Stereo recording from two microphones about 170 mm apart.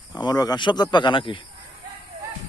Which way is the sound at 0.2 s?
25° left (ahead or behind).